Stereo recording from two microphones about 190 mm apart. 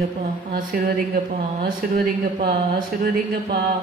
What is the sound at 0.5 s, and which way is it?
Speech, 50° right (ahead or behind).